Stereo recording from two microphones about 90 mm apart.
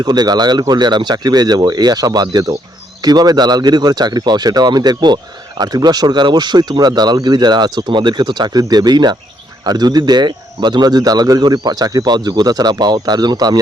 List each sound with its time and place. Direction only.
0.0 s speech: 50° right (ahead or behind)